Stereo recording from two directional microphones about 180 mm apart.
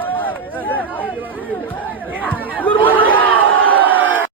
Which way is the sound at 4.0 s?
90° right.